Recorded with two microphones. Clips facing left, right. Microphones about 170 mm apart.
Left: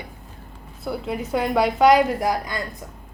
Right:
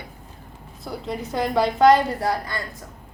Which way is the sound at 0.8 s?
5° left (ahead or behind).